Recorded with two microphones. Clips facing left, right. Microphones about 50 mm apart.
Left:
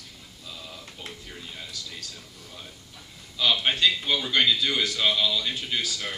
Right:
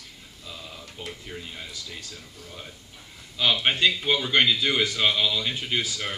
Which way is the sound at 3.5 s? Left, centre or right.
Right.